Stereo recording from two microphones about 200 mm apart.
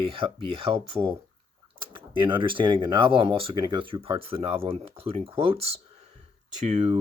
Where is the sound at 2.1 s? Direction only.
25° right (ahead or behind).